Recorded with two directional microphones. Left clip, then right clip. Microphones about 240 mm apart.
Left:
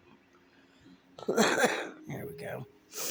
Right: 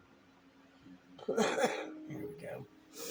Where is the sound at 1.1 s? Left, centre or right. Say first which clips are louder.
Left 6 dB; left.